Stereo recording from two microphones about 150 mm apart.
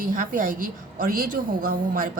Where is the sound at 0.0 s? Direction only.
65° right (ahead or behind).